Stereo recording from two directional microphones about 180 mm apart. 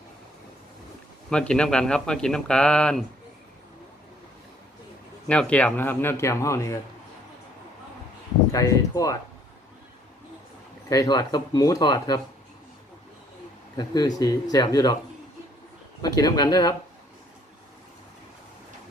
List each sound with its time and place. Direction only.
1.3 s speech: 5° left (ahead or behind)
5.3 s a man's voice: 5° left (ahead or behind)
8.5 s a man's voice: 20° left (ahead or behind)
10.8 s speech: 20° left (ahead or behind)
13.7 s speech: 20° left (ahead or behind)
16.0 s speech: 20° left (ahead or behind)